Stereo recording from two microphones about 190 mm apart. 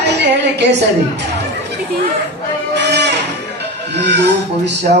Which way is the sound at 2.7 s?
65° right (ahead or behind).